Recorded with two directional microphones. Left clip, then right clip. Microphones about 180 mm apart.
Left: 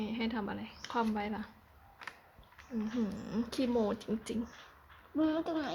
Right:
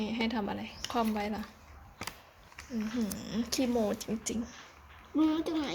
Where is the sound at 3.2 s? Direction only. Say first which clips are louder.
Right 3 dB; 15° left (ahead or behind).